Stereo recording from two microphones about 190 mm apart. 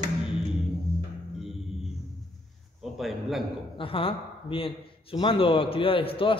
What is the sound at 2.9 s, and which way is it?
Speech, centre (ahead or behind).